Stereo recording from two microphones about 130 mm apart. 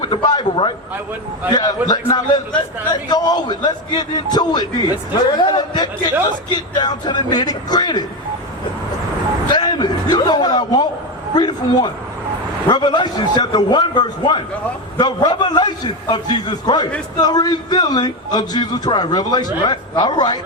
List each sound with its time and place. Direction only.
0.0 s a man's voice: 35° left (ahead or behind)
9.5 s a man's voice: 35° left (ahead or behind)